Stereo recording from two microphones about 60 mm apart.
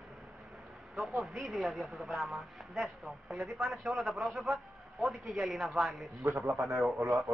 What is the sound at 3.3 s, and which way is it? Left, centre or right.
Speech, right.